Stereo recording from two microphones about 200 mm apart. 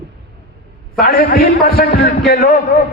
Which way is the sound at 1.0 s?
50° left (ahead or behind).